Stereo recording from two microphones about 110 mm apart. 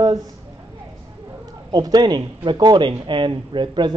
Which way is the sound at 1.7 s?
40° right (ahead or behind).